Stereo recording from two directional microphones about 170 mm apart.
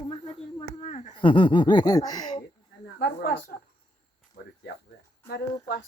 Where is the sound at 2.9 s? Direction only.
65° left (ahead or behind).